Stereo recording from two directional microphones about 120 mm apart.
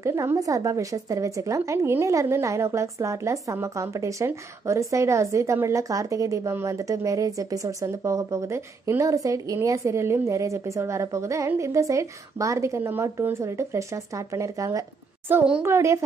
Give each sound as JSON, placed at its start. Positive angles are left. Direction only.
{"t": 0.0, "sound": "a woman's voice", "side_deg": -25}